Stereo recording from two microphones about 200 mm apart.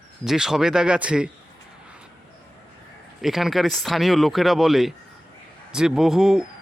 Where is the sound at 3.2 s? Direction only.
Centre (ahead or behind).